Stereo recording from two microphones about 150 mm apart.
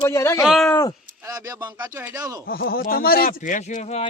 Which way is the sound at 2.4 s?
90° left.